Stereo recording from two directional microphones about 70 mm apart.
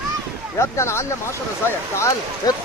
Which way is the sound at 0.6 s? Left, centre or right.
Left.